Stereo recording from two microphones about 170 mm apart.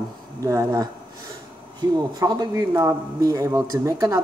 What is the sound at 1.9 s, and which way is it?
Speech, 20° right (ahead or behind).